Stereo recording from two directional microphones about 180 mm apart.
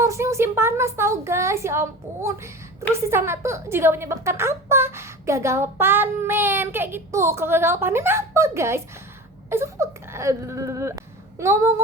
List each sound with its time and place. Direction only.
0.0 s a woman's voice: 15° right (ahead or behind)